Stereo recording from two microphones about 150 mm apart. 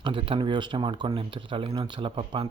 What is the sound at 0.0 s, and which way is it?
Speech, 35° right (ahead or behind).